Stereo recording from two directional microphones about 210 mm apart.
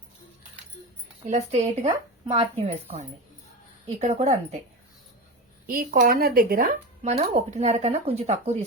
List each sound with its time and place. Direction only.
1.2 s a woman's voice: 30° right (ahead or behind)
5.6 s speech: 45° right (ahead or behind)